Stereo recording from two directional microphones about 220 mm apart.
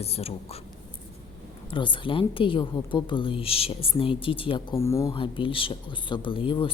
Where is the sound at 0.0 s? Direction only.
25° left (ahead or behind).